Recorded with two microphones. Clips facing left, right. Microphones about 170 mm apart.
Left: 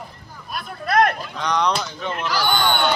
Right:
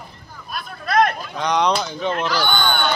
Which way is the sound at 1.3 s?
15° right (ahead or behind).